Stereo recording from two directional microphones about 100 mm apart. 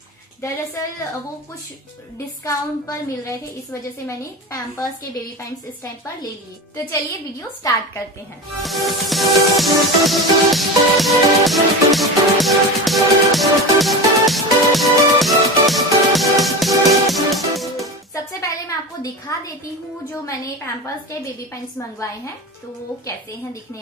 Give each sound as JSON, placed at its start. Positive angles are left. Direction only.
{"t": 2.1, "sound": "a woman's voice", "side_deg": 30}
{"t": 6.9, "sound": "a woman's voice", "side_deg": 35}
{"t": 8.6, "sound": "music", "side_deg": 0}
{"t": 18.1, "sound": "music", "side_deg": 30}
{"t": 19.3, "sound": "a woman's voice", "side_deg": 30}